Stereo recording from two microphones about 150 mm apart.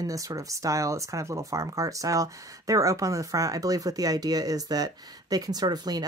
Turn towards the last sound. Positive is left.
turn(degrees=-25)  # may be behind; listen again after turning